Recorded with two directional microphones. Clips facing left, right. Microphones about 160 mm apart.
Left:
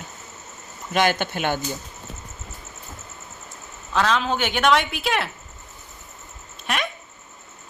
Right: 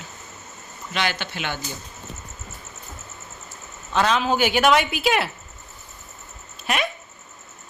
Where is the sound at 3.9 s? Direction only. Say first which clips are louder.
Right 1 dB; 5° right (ahead or behind).